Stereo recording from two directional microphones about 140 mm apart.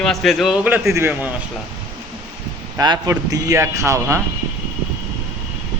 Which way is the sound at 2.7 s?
30° right (ahead or behind).